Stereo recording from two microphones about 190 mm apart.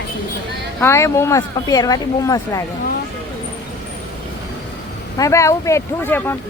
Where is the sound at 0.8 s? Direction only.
15° left (ahead or behind).